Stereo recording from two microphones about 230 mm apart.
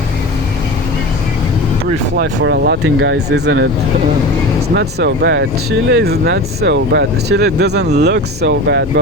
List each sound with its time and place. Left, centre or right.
2.1 s speech: right
4.7 s speech: right